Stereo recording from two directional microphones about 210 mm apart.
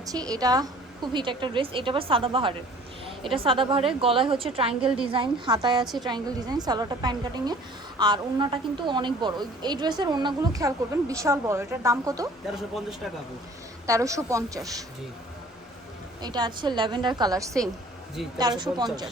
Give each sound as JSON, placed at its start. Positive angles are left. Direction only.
{"t": 0.0, "sound": "a woman's voice", "side_deg": -15}
{"t": 4.7, "sound": "speech", "side_deg": -5}
{"t": 5.0, "sound": "a woman's voice", "side_deg": -25}
{"t": 12.5, "sound": "speech", "side_deg": 0}
{"t": 13.8, "sound": "a woman's voice", "side_deg": -15}
{"t": 16.2, "sound": "a woman's voice", "side_deg": -20}